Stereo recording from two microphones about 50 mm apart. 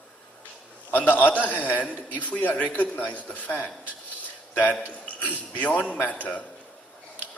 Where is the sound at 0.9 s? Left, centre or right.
Left.